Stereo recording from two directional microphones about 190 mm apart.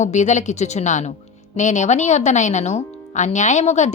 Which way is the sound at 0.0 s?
40° left (ahead or behind).